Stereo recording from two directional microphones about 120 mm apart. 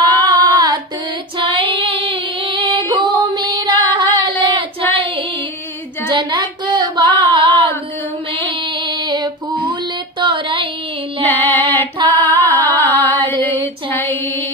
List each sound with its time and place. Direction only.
0.2 s female singing: 30° right (ahead or behind)
1.4 s female singing: 45° right (ahead or behind)
3.2 s music: 40° right (ahead or behind)
3.8 s female singing: 40° right (ahead or behind)
4.9 s child singing: 45° right (ahead or behind)
6.0 s female singing: 40° right (ahead or behind)
8.5 s child singing: 40° right (ahead or behind)
10.2 s a sound: 45° right (ahead or behind)
11.2 s music: 15° left (ahead or behind)
11.7 s female singing: 15° left (ahead or behind)
12.8 s a sound: 20° left (ahead or behind)
13.8 s mantra: 15° left (ahead or behind)